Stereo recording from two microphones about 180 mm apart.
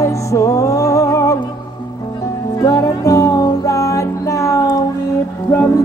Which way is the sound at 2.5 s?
20° left (ahead or behind).